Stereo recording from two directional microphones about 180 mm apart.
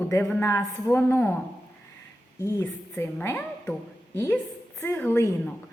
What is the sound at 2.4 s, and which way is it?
A woman's voice, 15° left (ahead or behind).